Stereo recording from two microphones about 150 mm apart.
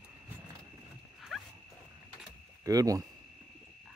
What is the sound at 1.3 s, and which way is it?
Dog, centre (ahead or behind).